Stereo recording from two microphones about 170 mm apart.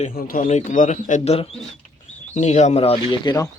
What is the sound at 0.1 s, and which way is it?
Speech, 60° left (ahead or behind).